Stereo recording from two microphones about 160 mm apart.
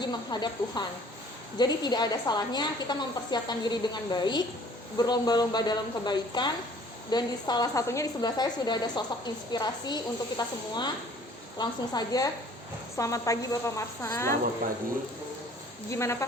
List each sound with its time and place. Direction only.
0.0 s a woman's voice: 25° left (ahead or behind)
15.9 s a woman's voice: 15° left (ahead or behind)